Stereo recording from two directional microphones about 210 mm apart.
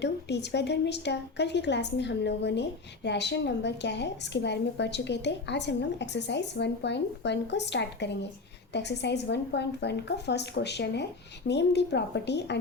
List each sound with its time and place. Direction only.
0.0 s a woman's voice: 55° left (ahead or behind)